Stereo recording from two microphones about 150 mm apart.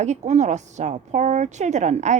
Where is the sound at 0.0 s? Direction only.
50° right (ahead or behind).